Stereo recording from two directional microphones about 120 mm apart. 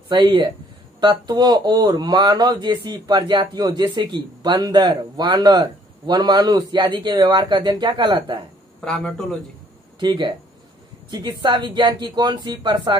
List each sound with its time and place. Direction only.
0.1 s speech: 40° right (ahead or behind)
8.8 s a man's voice: 5° left (ahead or behind)
9.9 s speech: 40° right (ahead or behind)